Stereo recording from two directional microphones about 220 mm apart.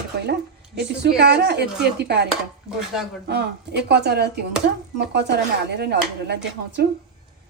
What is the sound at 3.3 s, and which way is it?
Speech, 50° right (ahead or behind).